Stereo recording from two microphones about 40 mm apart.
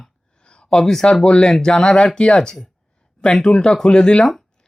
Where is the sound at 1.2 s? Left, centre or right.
Left.